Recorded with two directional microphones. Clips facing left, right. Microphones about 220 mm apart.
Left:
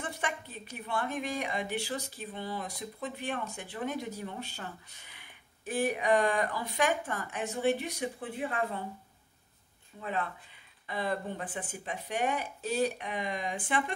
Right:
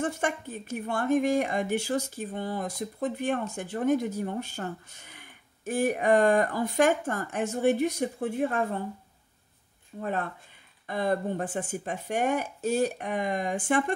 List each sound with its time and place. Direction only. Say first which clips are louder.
0.0 s a woman's voice: right 8 dB; 45° right (ahead or behind)
9.9 s a woman's voice: right 4 dB; 45° right (ahead or behind)